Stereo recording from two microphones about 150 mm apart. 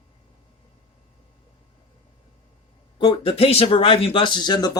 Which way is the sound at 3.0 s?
35° left (ahead or behind).